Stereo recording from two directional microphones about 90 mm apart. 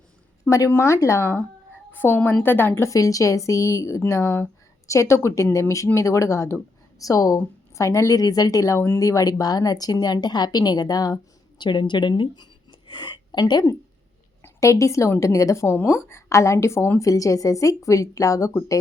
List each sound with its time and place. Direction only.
0.5 s a woman's voice: 35° left (ahead or behind); by 12.5 s 60° left (ahead or behind)
12.9 s a sound: 55° left (ahead or behind)
13.4 s a woman's voice: 45° left (ahead or behind)
14.4 s a woman's voice: 35° left (ahead or behind)